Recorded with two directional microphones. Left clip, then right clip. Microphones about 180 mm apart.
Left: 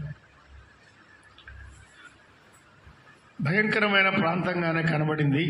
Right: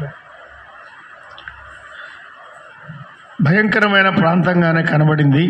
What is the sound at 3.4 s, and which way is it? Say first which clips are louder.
A man's voice: right 9 dB; 45° right (ahead or behind).